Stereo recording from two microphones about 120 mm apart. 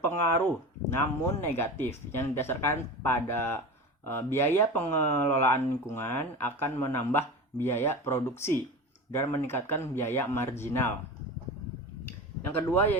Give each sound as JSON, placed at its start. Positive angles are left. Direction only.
{"t": 0.0, "sound": "speech", "side_deg": 20}
{"t": 12.7, "sound": "speech", "side_deg": 15}